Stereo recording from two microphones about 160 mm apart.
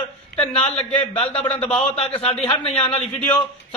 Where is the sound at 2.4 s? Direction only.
40° left (ahead or behind).